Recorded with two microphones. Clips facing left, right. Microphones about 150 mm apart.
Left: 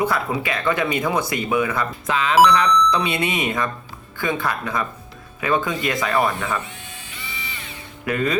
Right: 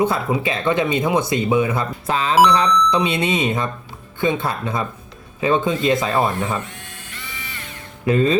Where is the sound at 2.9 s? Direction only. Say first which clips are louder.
Right 3 dB; 20° right (ahead or behind).